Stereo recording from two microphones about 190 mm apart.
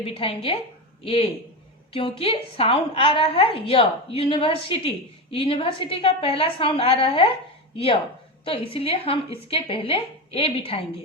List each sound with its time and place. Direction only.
0.0 s a woman's voice: 30° left (ahead or behind)
8.4 s a woman's voice: 30° left (ahead or behind)